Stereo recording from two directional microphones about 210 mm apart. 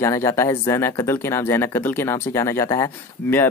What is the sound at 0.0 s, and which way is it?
Speech, 15° left (ahead or behind).